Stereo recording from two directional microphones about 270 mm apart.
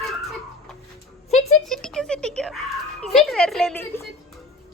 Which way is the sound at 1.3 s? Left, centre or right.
Left.